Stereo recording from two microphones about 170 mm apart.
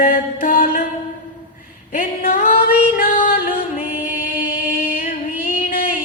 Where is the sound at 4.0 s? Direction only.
55° left (ahead or behind).